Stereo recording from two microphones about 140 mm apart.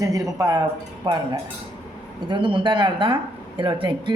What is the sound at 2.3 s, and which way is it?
Speech, 35° right (ahead or behind).